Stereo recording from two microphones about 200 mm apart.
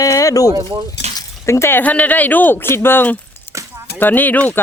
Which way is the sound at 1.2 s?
15° left (ahead or behind).